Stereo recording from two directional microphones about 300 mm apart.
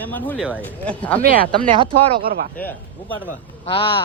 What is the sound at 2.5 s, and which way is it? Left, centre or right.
Speech, centre.